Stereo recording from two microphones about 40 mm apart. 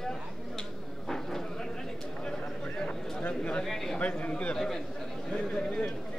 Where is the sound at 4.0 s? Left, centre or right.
Left.